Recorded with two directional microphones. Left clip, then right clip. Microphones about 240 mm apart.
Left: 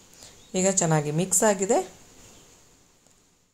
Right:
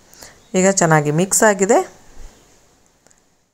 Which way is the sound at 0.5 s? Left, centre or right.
Right.